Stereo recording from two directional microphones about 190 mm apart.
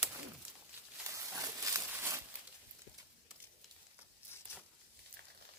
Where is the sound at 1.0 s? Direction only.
15° right (ahead or behind).